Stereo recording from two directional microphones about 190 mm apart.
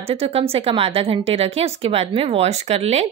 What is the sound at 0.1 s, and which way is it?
A woman's voice, 30° right (ahead or behind).